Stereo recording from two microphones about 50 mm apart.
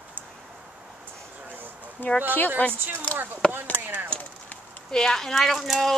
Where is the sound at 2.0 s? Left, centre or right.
Left.